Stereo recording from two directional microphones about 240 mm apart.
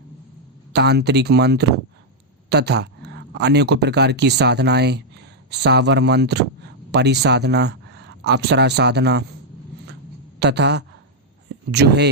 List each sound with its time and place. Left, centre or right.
0.7 s speech: right
10.4 s speech: right